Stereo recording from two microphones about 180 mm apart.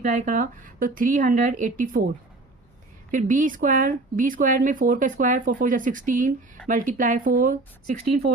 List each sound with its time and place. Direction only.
0.0 s speech: 45° right (ahead or behind)
3.1 s speech: 45° right (ahead or behind)